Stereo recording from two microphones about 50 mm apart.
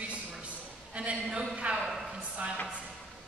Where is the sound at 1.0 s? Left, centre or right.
Right.